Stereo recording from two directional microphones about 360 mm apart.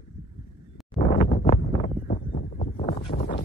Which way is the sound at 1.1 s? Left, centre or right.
Centre.